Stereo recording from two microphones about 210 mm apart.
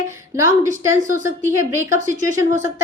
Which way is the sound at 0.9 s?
35° right (ahead or behind).